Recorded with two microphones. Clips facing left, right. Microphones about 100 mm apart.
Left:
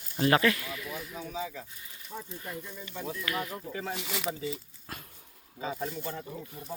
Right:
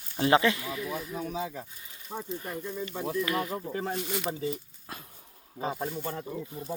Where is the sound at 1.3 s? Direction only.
55° right (ahead or behind).